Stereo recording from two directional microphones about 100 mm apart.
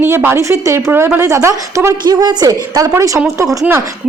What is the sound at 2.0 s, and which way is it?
A woman's voice, 45° right (ahead or behind).